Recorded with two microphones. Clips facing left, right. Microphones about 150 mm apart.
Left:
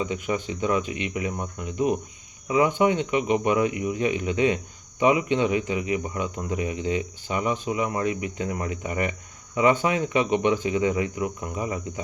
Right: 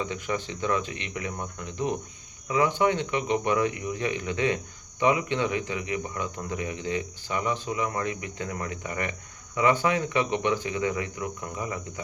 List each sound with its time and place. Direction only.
0.0 s speech: 15° left (ahead or behind)